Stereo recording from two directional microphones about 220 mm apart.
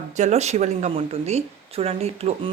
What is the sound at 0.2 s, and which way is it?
Speech, 30° right (ahead or behind).